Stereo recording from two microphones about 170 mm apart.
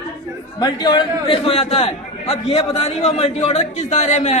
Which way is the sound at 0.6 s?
25° left (ahead or behind).